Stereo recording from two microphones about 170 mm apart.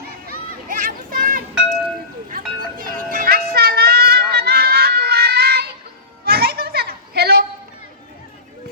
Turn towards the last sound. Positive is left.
turn(degrees=-65)  # may be behind; listen again after turning